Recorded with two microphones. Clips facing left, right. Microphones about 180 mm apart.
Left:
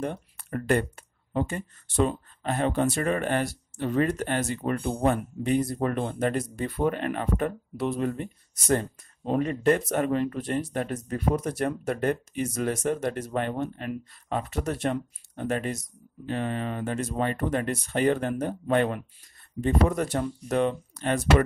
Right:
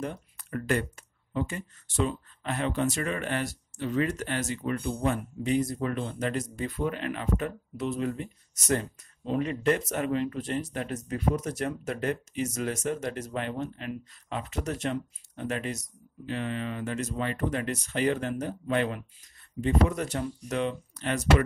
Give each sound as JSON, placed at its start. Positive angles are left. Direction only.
{"t": 0.0, "sound": "speech", "side_deg": 55}
{"t": 4.7, "sound": "speech", "side_deg": 50}
{"t": 11.3, "sound": "speech", "side_deg": 55}